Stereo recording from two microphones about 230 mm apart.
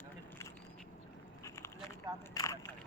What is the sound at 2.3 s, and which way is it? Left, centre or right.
Speech, centre.